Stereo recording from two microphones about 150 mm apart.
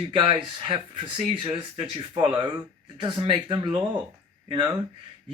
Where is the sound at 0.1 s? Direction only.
35° right (ahead or behind).